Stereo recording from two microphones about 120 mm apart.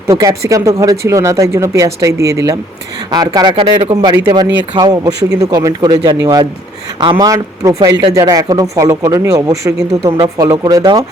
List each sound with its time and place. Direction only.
0.1 s speech: 25° right (ahead or behind)